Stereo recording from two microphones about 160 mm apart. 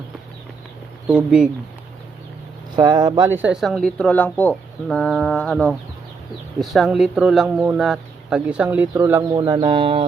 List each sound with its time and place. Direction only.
1.0 s speech: 10° right (ahead or behind)
2.7 s speech: 25° right (ahead or behind)
9.3 s speech: 25° right (ahead or behind)